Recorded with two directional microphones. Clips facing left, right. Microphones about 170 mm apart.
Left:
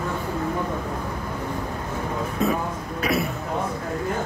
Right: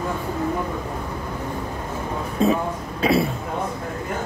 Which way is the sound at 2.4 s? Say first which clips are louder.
Right 5 dB; 30° right (ahead or behind).